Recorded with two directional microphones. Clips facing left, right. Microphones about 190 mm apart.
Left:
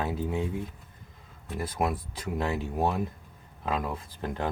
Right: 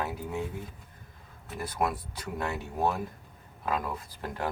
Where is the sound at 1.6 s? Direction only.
25° left (ahead or behind).